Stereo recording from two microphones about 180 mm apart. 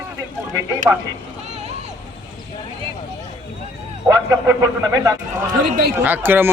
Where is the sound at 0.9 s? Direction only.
10° right (ahead or behind).